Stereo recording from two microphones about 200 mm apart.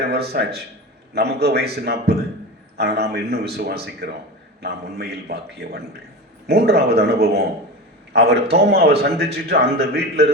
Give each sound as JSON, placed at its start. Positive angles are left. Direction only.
{"t": 0.1, "sound": "a man's voice", "side_deg": -55}